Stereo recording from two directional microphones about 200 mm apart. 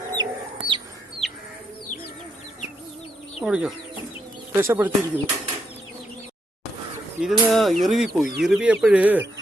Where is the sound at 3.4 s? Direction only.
5° right (ahead or behind).